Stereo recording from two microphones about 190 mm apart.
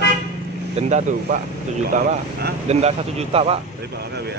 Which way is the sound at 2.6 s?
35° right (ahead or behind).